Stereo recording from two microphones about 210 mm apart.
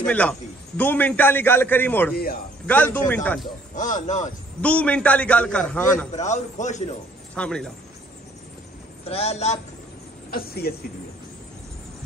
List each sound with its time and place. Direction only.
0.0 s a man's voice: 5° left (ahead or behind)
3.7 s a man's voice: 35° left (ahead or behind)
4.6 s a man's voice: 5° left (ahead or behind)
6.1 s a man's voice: 35° left (ahead or behind)
7.3 s speech: 5° left (ahead or behind)
9.0 s a man's voice: 30° left (ahead or behind)
10.3 s speech: 45° left (ahead or behind)